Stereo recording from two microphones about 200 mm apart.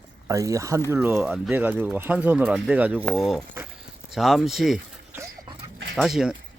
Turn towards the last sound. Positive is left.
turn(degrees=0)  # may be behind; listen again after turning